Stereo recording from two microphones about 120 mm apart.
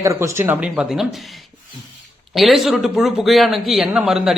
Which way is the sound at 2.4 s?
Centre (ahead or behind).